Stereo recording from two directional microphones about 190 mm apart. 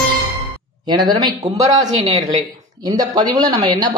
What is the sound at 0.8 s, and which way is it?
Speech, 20° right (ahead or behind).